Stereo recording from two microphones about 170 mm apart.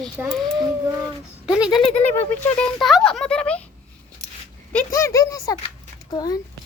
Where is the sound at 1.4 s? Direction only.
5° right (ahead or behind).